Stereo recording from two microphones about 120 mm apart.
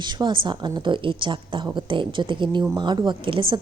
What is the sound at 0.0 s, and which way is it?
A woman's voice, 40° right (ahead or behind).